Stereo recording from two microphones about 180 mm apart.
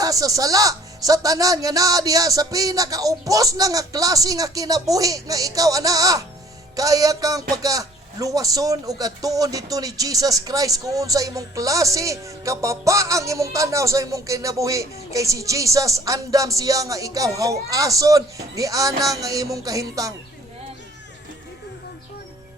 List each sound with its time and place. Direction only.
0.0 s speech: 20° right (ahead or behind)